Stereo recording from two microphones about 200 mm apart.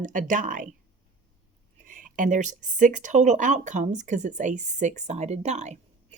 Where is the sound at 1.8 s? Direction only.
40° right (ahead or behind).